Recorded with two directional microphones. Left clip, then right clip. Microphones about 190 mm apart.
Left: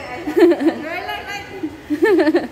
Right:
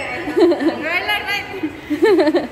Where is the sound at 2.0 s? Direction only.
15° left (ahead or behind).